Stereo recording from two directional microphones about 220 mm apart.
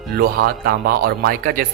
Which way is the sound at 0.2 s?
45° right (ahead or behind).